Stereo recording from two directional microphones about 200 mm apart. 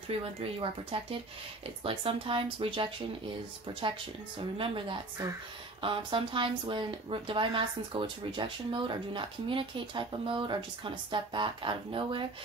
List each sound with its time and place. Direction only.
0.4 s speech: 25° right (ahead or behind)
4.6 s speech: 25° right (ahead or behind)